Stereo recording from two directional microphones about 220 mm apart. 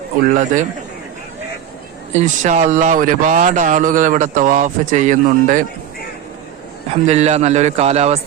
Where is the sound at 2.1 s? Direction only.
30° right (ahead or behind).